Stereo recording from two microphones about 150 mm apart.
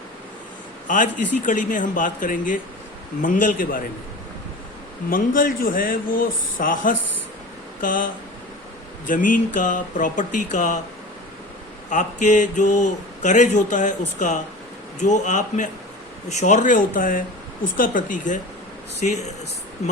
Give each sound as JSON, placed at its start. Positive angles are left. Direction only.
{"t": 0.9, "sound": "speech", "side_deg": 60}
{"t": 5.0, "sound": "speech", "side_deg": 70}
{"t": 11.9, "sound": "speech", "side_deg": 55}